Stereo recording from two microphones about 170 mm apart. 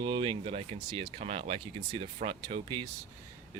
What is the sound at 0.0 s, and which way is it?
Speech, 30° right (ahead or behind).